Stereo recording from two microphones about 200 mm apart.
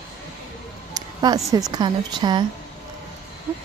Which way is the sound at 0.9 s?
20° right (ahead or behind).